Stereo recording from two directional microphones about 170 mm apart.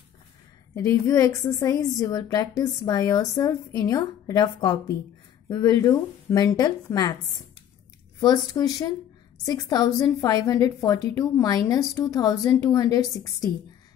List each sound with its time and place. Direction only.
0.7 s a woman's voice: 20° left (ahead or behind)
8.2 s a woman's voice: 20° left (ahead or behind)